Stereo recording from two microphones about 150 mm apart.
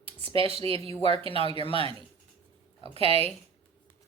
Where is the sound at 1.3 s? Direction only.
35° left (ahead or behind).